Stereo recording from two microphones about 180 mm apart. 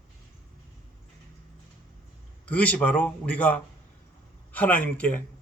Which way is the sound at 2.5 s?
5° left (ahead or behind).